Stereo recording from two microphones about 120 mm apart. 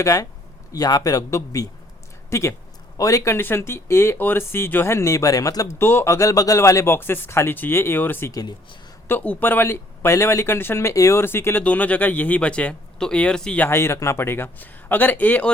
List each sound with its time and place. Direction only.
0.0 s speech: 30° left (ahead or behind)
8.3 s speech: 30° left (ahead or behind)
9.0 s speech: 15° left (ahead or behind)
13.7 s speech: 20° left (ahead or behind)